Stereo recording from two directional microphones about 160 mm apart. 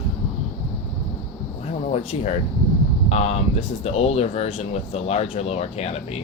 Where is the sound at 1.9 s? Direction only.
40° left (ahead or behind).